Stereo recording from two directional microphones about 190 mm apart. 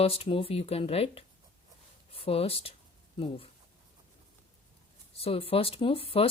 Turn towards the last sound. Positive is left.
turn(degrees=30)  # may be behind; listen again after turning